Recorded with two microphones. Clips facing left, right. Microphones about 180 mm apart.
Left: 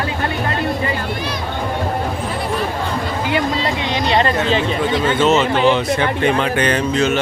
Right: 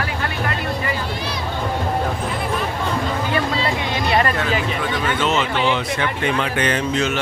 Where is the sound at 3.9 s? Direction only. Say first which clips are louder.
Left 4 dB; 25° left (ahead or behind).